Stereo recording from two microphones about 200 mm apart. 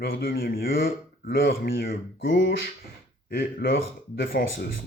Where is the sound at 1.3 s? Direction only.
70° left (ahead or behind).